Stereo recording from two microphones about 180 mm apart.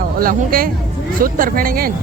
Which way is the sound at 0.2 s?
55° right (ahead or behind).